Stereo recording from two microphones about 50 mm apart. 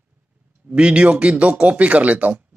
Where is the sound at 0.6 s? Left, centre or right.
Right.